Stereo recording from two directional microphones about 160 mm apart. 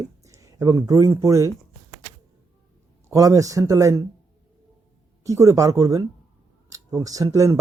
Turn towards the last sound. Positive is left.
turn(degrees=-20)  # may be behind; listen again after turning